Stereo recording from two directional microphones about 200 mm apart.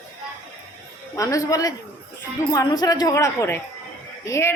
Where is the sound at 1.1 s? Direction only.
15° left (ahead or behind).